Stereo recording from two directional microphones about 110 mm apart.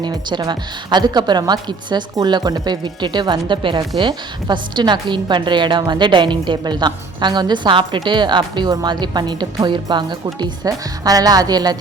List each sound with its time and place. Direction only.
0.0 s a woman's voice: 40° right (ahead or behind)